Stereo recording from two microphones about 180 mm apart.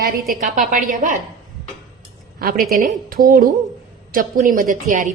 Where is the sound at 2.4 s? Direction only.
55° right (ahead or behind).